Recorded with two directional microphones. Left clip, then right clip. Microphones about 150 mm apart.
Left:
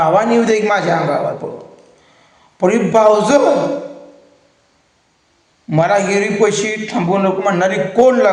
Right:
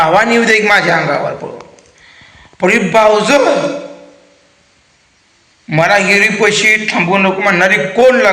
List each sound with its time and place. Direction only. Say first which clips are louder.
0.0 s a man's voice: right 3 dB; 10° left (ahead or behind)
2.6 s a man's voice: right 3 dB; 10° left (ahead or behind)
5.6 s a man's voice: right 4 dB; 15° left (ahead or behind)
6.8 s a man's voice: right 4 dB; 25° left (ahead or behind); by 8.3 s 10° left (ahead or behind)